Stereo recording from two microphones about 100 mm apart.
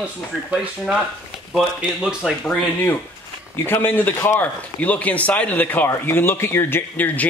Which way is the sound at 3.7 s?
20° left (ahead or behind).